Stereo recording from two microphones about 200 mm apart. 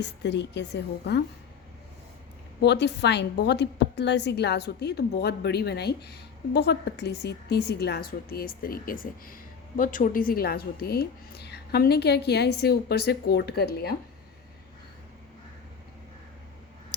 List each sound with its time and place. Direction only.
0.0 s a woman's voice: 60° left (ahead or behind)
2.6 s a woman's voice: 60° left (ahead or behind)